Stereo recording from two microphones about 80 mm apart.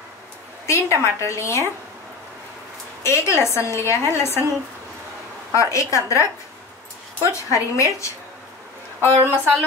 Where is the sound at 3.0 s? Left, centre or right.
Left.